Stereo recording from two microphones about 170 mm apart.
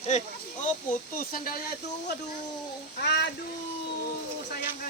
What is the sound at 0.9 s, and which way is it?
Speech, 55° left (ahead or behind).